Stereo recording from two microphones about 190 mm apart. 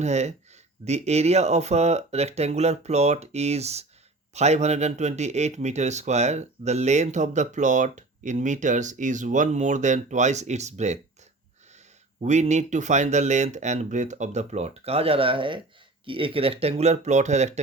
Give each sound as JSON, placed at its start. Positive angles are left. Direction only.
{"t": 0.0, "sound": "speech", "side_deg": -35}
{"t": 12.2, "sound": "speech", "side_deg": -40}